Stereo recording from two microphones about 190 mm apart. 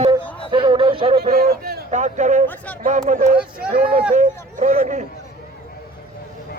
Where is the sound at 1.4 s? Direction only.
50° right (ahead or behind).